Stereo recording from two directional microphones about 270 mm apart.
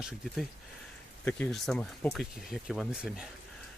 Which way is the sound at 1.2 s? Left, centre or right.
Centre.